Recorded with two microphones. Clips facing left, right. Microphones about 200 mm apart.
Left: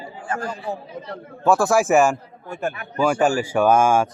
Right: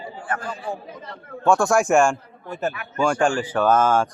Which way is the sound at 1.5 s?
Centre (ahead or behind).